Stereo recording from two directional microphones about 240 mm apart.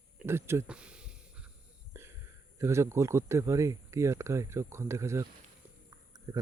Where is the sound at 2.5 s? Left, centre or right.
Centre.